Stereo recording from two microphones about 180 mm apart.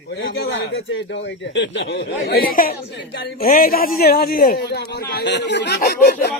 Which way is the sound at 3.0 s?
65° left (ahead or behind).